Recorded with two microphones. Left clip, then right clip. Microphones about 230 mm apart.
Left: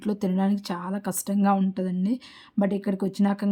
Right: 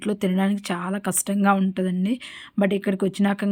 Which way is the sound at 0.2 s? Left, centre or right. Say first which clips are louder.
Right 3 dB; centre.